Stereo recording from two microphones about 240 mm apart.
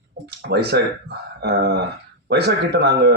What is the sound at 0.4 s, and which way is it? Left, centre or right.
Speech, right.